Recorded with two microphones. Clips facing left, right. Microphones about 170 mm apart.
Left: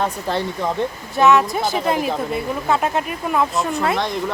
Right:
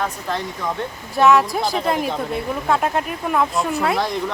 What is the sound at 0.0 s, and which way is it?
Speech, 30° left (ahead or behind).